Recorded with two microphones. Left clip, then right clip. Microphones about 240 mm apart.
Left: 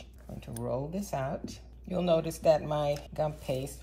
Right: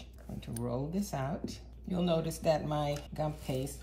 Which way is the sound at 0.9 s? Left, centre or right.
Left.